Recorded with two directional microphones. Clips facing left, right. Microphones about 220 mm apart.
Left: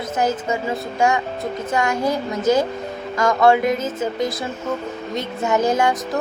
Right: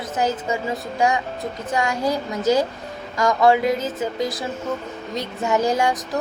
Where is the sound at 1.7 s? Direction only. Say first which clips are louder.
Left 1 dB; 15° right (ahead or behind).